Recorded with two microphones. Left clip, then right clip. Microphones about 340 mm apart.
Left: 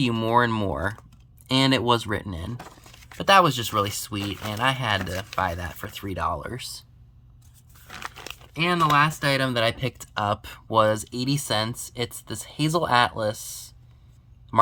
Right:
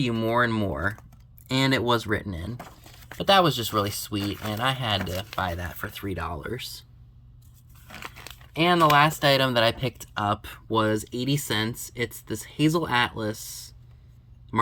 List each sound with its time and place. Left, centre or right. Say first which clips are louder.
0.0 s speech: left 2 dB; centre
4.2 s speech: even; left
4.5 s speech: left 3 dB; centre
7.9 s crumpling: left 4 dB; centre
8.5 s speech: right 1 dB; centre